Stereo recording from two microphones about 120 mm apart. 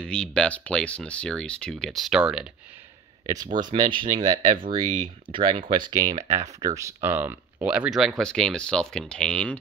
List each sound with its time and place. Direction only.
0.0 s speech: 10° left (ahead or behind)
3.7 s speech: 40° right (ahead or behind); by 9.6 s 10° left (ahead or behind)